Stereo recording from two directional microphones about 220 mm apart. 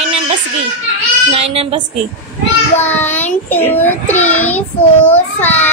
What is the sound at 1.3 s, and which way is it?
Speech, 25° right (ahead or behind).